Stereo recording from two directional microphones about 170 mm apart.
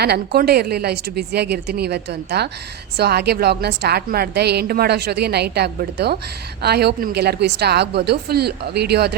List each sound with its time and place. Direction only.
0.0 s a woman's voice: 70° right (ahead or behind)